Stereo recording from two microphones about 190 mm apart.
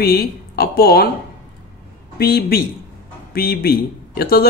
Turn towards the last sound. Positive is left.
turn(degrees=55)  # may be behind; listen again after turning